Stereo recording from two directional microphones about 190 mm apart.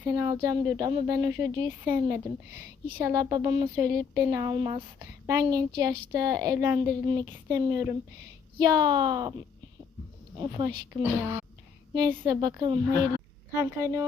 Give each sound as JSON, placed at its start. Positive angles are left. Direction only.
{"t": 0.0, "sound": "speech", "side_deg": -20}
{"t": 10.3, "sound": "speech", "side_deg": -25}